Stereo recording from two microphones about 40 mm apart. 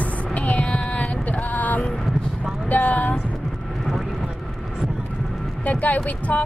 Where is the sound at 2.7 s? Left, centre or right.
Left.